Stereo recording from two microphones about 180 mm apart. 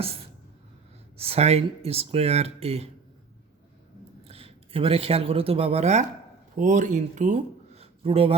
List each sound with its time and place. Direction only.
1.1 s speech: 35° right (ahead or behind)
4.2 s speech: 30° right (ahead or behind)